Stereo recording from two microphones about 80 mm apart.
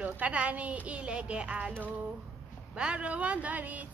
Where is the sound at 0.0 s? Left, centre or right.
Centre.